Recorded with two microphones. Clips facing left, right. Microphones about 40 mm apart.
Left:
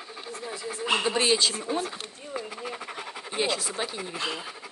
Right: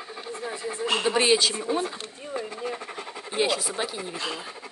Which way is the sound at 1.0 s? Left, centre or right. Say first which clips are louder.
Right 5 dB; centre.